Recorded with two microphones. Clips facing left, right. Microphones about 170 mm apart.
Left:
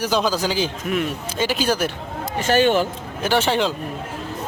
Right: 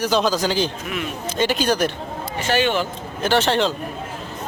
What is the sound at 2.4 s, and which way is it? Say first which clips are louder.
Speech: left 3 dB; 45° left (ahead or behind).